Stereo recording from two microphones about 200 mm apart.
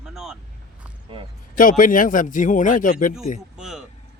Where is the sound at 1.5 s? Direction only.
40° left (ahead or behind).